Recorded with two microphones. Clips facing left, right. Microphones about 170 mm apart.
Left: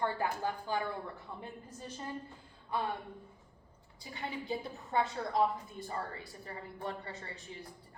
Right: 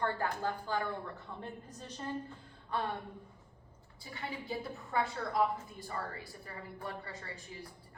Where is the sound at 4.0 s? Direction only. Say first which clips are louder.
Left 2 dB; 20° left (ahead or behind).